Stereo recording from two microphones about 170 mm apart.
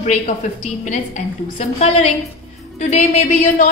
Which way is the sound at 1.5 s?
40° left (ahead or behind).